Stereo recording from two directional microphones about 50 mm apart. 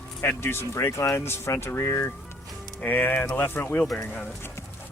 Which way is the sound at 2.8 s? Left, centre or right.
Left.